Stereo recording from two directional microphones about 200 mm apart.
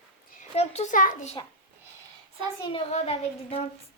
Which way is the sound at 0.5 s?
35° left (ahead or behind).